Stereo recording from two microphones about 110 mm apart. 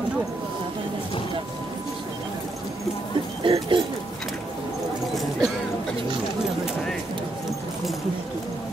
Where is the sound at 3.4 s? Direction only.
60° right (ahead or behind).